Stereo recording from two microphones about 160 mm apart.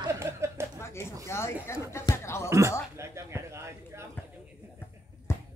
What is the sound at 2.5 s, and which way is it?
Speech, 20° right (ahead or behind).